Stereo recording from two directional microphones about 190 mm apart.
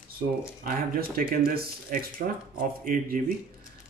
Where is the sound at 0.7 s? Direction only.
50° right (ahead or behind).